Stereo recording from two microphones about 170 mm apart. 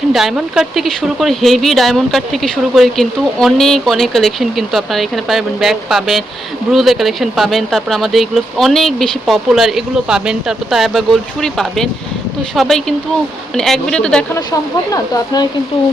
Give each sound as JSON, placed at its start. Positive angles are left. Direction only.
{"t": 0.1, "sound": "speech", "side_deg": -5}
{"t": 14.3, "sound": "speech", "side_deg": 20}